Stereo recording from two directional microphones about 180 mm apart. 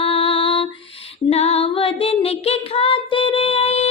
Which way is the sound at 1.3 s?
35° left (ahead or behind).